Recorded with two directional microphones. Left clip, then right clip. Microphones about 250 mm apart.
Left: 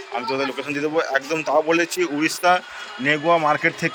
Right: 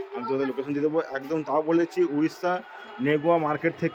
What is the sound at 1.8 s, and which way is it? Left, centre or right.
Speech, centre.